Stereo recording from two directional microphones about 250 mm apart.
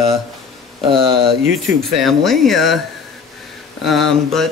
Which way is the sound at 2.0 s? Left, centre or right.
Centre.